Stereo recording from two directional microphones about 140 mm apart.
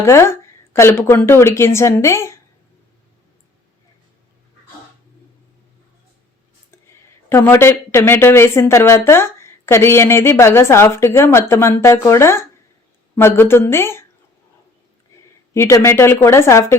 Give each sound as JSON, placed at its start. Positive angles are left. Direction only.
{"t": 0.0, "sound": "speech", "side_deg": 20}
{"t": 7.3, "sound": "a woman's voice", "side_deg": 15}
{"t": 15.5, "sound": "speech", "side_deg": 20}